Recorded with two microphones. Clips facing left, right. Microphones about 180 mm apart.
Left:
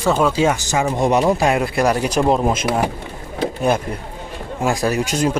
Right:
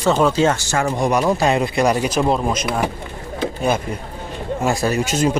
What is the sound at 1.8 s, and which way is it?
Speech, 10° right (ahead or behind).